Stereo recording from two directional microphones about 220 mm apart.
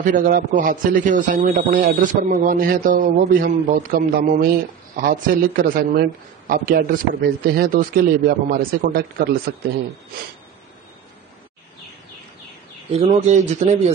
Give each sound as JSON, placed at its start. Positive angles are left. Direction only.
{"t": 0.0, "sound": "a man's voice", "side_deg": -35}
{"t": 12.9, "sound": "speech", "side_deg": -30}